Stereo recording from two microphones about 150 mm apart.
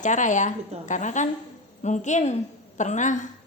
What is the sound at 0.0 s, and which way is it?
A woman's voice, 55° left (ahead or behind).